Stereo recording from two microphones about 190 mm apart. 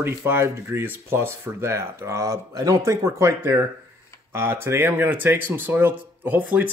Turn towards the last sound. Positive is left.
turn(degrees=-10)  # may be behind; listen again after turning